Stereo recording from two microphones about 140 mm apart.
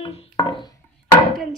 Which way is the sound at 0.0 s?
45° left (ahead or behind).